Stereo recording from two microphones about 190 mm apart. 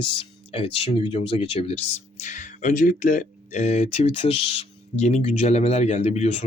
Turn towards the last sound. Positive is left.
turn(degrees=35)  # may be behind; listen again after turning